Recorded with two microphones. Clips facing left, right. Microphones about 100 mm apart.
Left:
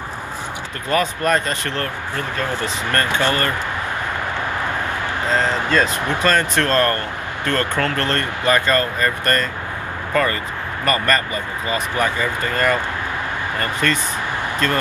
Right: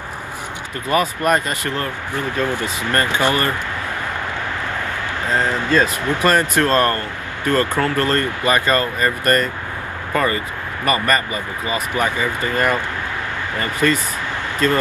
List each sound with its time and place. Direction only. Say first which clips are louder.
0.8 s speech: right 1 dB; 15° right (ahead or behind)
5.3 s speech: right 1 dB; 15° right (ahead or behind)